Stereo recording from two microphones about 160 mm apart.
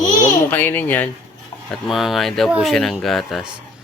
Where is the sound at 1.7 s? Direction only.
Centre (ahead or behind).